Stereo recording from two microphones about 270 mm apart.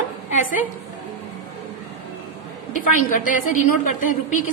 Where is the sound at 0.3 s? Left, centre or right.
Left.